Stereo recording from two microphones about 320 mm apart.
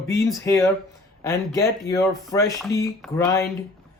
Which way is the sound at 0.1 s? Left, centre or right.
Centre.